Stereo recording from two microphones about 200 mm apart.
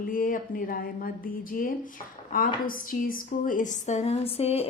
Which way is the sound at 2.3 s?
45° left (ahead or behind).